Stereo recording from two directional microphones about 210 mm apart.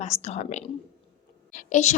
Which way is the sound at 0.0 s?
30° left (ahead or behind).